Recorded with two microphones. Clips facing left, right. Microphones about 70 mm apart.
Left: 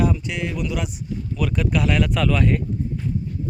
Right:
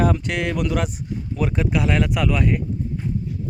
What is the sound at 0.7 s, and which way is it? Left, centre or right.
Speech, right.